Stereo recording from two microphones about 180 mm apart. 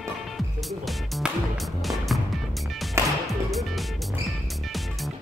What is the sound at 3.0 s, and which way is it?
Music, 15° right (ahead or behind).